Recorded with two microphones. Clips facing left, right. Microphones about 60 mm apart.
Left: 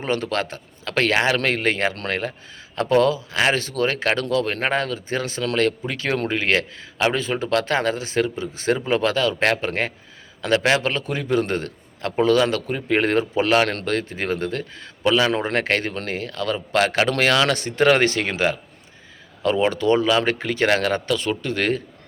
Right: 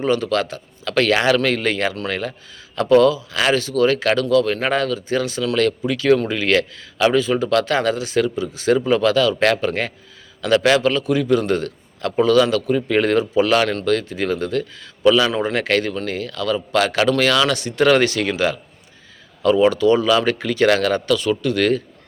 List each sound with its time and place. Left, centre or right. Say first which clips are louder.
0.0 s speech: right 5 dB; left
15.3 s speech: right 2 dB; left